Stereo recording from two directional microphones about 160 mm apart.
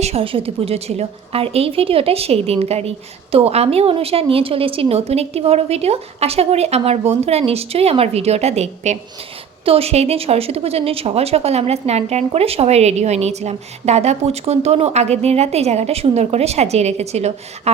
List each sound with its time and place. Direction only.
0.0 s a woman's voice: 35° right (ahead or behind)